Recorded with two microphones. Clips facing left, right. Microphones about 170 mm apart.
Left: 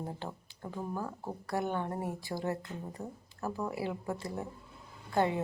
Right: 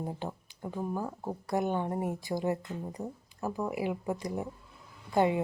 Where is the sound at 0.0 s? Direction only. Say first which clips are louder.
Right 3 dB; 15° right (ahead or behind).